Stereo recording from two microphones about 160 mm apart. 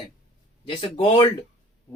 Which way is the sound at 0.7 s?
35° left (ahead or behind).